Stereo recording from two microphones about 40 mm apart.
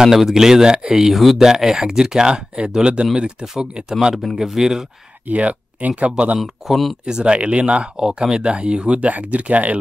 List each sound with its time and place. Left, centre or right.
0.0 s speech: centre
1.1 s speech: centre; by 3.4 s right
4.4 s speech: centre
5.3 s speech: right
6.4 s speech: centre
7.1 s speech: right
9.0 s speech: right